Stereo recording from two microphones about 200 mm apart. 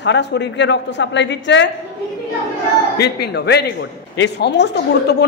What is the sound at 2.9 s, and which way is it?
Speech, 55° left (ahead or behind).